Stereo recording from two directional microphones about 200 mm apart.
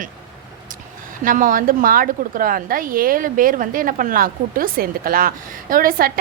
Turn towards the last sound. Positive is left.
turn(degrees=-45)  # may be behind; listen again after turning